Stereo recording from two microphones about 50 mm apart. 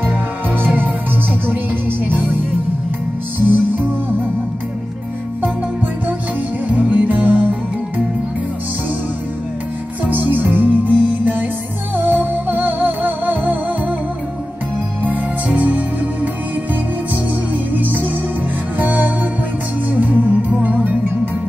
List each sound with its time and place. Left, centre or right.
1.5 s music: right
3.3 s music: right
6.7 s music: right
10.0 s music: right
12.0 s music: right
15.0 s music: right
17.7 s music: right